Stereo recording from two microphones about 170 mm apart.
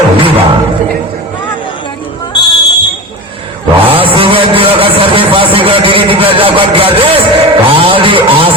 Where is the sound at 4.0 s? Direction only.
30° right (ahead or behind).